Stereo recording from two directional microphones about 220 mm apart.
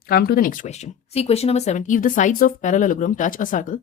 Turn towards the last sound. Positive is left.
turn(degrees=35)  # may be behind; listen again after turning